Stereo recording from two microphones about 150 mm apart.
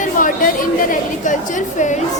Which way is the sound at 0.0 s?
65° left (ahead or behind).